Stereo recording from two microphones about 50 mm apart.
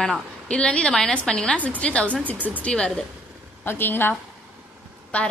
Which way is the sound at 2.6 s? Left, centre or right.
Centre.